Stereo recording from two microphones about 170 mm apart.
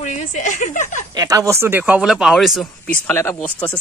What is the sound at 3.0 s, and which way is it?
Speech, 15° left (ahead or behind).